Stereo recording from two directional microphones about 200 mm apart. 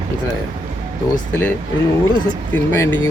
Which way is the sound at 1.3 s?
10° left (ahead or behind).